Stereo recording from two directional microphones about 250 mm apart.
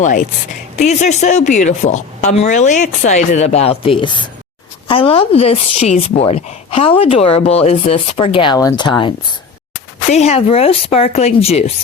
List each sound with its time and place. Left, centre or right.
0.0 s a woman's voice: left